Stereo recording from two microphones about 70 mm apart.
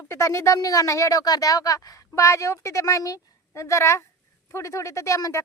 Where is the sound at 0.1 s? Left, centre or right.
Left.